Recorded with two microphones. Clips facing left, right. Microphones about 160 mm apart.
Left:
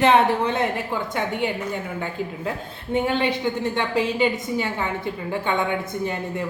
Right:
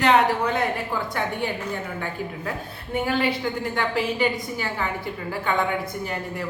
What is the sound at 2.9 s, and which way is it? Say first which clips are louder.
A woman's voice: left 2 dB; 25° left (ahead or behind).